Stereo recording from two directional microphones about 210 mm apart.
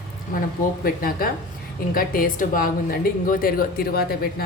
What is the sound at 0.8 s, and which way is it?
A woman's voice, 45° left (ahead or behind).